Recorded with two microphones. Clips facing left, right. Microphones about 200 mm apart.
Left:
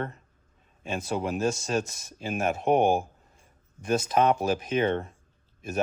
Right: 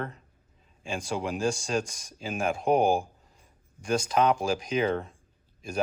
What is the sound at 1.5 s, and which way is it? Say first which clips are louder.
Speech: left 1 dB; 5° left (ahead or behind).